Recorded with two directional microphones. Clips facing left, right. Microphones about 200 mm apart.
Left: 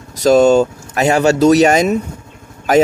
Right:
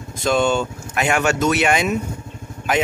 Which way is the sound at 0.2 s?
40° left (ahead or behind).